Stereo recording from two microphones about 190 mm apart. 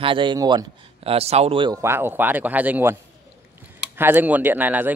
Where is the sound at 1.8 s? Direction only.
10° right (ahead or behind).